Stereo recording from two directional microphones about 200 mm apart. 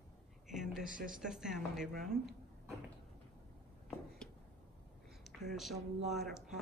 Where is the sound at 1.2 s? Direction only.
5° right (ahead or behind).